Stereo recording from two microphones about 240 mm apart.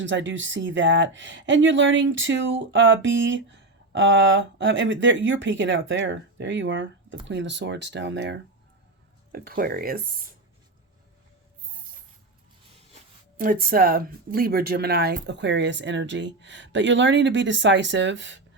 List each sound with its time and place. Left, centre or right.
0.0 s speech: right
13.3 s speech: right